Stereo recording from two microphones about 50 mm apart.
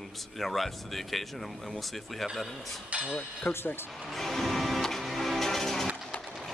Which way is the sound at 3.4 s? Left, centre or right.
Left.